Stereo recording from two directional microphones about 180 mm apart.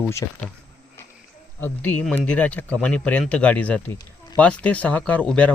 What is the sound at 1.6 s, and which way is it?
Speech, 10° left (ahead or behind).